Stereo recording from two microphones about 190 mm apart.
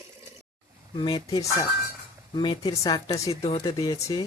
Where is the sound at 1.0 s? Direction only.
25° left (ahead or behind).